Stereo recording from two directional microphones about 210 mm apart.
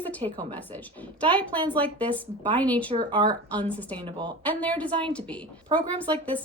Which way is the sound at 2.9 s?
25° right (ahead or behind).